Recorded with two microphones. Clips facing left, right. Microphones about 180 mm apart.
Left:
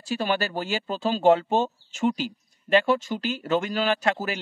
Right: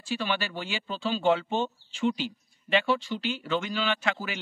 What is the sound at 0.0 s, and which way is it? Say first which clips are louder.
Speech: left 4 dB; 40° left (ahead or behind).